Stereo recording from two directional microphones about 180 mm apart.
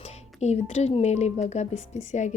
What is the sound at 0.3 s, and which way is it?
Speech, 35° left (ahead or behind).